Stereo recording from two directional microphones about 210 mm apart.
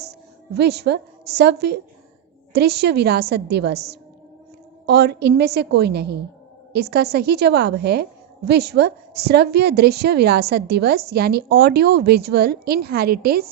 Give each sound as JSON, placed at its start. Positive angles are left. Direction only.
{"t": 0.5, "sound": "a woman's voice", "side_deg": -50}
{"t": 4.9, "sound": "a woman's voice", "side_deg": -50}